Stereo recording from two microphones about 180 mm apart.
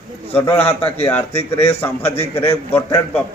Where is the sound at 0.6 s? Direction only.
35° left (ahead or behind).